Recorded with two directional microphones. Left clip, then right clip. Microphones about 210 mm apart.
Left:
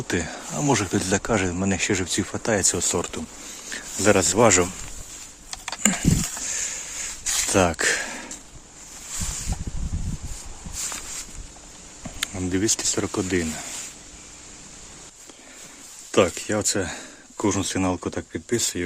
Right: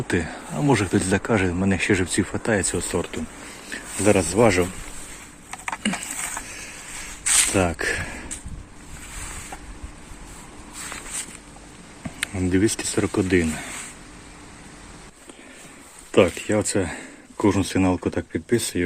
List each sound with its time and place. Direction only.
0.1 s speech: 10° left (ahead or behind)
5.5 s a sound: 35° left (ahead or behind)
7.5 s speech: 20° left (ahead or behind)
12.2 s speech: 5° left (ahead or behind)
16.1 s speech: 5° left (ahead or behind)